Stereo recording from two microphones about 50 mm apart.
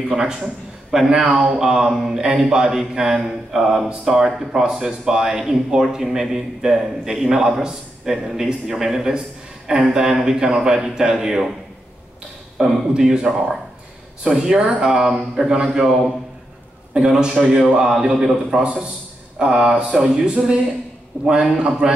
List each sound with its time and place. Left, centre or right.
0.1 s mantra: centre
12.5 s mantra: centre
16.9 s mantra: centre